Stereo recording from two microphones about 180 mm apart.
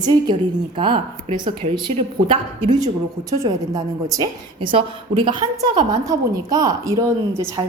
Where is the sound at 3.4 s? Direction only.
20° right (ahead or behind).